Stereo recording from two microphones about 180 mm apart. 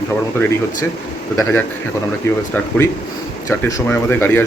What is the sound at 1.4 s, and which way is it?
Speech, 15° left (ahead or behind).